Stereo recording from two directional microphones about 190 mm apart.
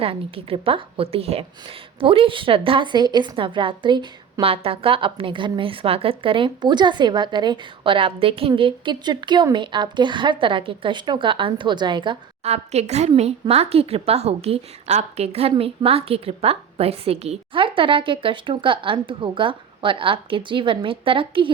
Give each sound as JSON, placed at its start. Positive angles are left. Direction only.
{"t": 0.0, "sound": "a woman's voice", "side_deg": -30}